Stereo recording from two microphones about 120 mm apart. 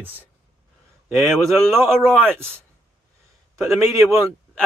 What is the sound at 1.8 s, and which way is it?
Speech, 20° right (ahead or behind).